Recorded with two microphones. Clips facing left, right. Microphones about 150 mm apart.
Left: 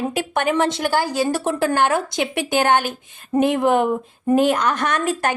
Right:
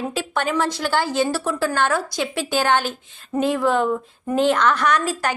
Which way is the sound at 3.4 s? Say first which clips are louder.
Left 3 dB; 20° left (ahead or behind).